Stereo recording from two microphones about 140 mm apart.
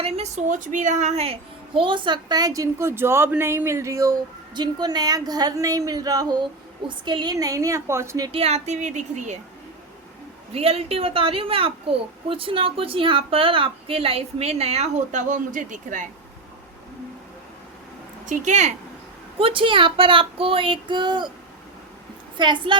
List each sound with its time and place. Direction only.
0.0 s a child's voice: 55° right (ahead or behind); by 8.3 s 20° right (ahead or behind)
8.3 s speech: 45° right (ahead or behind)
10.5 s a child's voice: 45° right (ahead or behind); by 16.0 s 65° right (ahead or behind)
18.3 s speech: 60° right (ahead or behind)
19.4 s a child's voice: 40° right (ahead or behind)
22.4 s a child's voice: 35° right (ahead or behind)